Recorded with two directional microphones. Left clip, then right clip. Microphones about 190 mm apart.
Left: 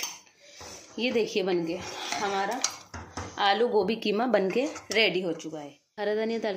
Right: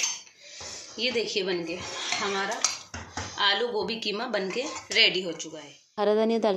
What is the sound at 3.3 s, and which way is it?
A woman's voice, 50° left (ahead or behind).